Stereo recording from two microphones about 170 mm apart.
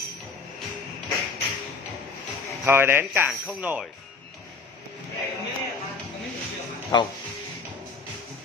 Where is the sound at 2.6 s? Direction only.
15° right (ahead or behind).